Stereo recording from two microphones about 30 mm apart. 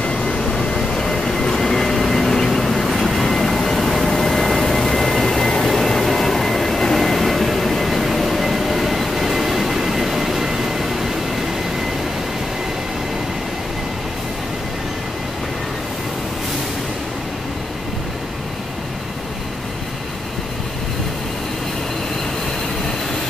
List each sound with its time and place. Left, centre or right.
0.2 s vehicle: left
0.7 s vehicle: centre